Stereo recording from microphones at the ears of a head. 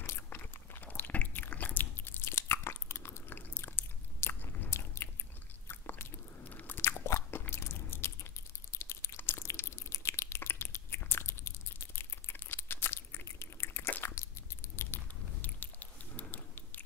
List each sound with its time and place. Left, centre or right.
0.0 s biting: left
6.7 s biting: left
8.7 s a sound: left
14.8 s biting: left